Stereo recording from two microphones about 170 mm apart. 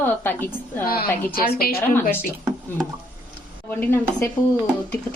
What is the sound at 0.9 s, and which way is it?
Speech, 60° left (ahead or behind).